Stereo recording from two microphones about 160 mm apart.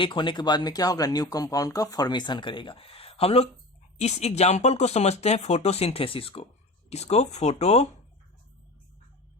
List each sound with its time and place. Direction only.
0.0 s speech: 30° left (ahead or behind)